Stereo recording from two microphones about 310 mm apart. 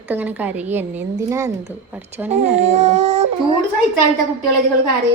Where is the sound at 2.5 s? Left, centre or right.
Right.